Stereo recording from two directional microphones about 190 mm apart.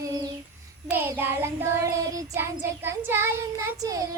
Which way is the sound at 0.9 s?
10° right (ahead or behind).